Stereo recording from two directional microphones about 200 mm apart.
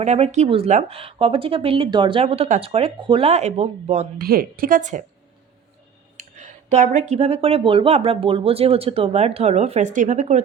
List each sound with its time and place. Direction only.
0.0 s speech: 35° right (ahead or behind)
4.2 s a woman's voice: 45° right (ahead or behind)
6.1 s speech: 35° right (ahead or behind)